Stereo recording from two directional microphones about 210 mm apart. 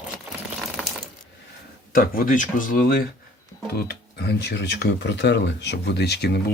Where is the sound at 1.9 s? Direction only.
40° left (ahead or behind).